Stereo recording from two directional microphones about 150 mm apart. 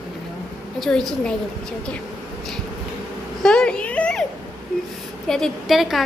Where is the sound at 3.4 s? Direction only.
5° left (ahead or behind).